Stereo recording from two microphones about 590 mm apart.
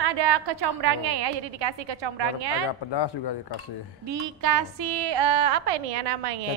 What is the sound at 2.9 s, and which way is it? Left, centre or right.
Speech, left.